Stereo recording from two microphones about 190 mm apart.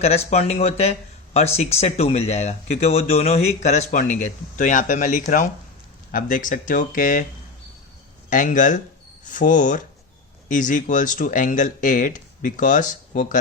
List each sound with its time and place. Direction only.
0.0 s speech: 35° left (ahead or behind)
8.3 s speech: 40° left (ahead or behind)